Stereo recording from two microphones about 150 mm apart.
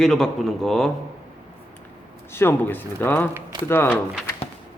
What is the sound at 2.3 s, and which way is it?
Speech, 15° left (ahead or behind).